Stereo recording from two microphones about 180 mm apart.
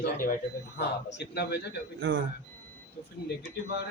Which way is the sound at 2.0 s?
90° right.